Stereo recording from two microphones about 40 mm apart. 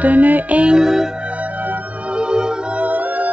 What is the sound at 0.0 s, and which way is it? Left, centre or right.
Music, right.